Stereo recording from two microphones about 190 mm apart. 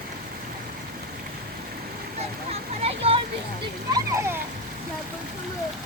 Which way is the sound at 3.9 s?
15° right (ahead or behind).